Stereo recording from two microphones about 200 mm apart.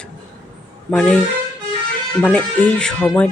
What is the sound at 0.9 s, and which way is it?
Speech, 5° left (ahead or behind).